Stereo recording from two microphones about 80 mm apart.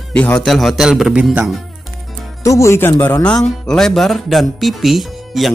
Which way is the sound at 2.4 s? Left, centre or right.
Left.